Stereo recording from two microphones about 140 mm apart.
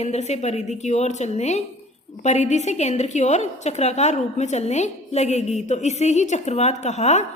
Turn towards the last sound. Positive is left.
turn(degrees=55)  # may be behind; listen again after turning